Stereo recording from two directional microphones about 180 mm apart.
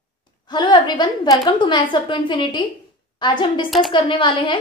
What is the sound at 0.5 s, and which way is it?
A woman's voice, 25° left (ahead or behind).